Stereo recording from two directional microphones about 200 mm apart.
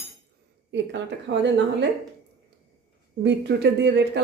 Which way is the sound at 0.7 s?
65° right (ahead or behind).